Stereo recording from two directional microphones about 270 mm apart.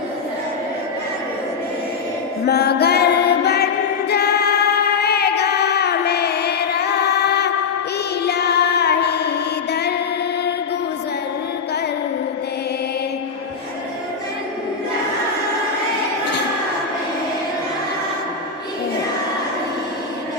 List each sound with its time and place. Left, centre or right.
2.5 s music: left
4.1 s choir: left
4.9 s child singing: left
8.2 s music: left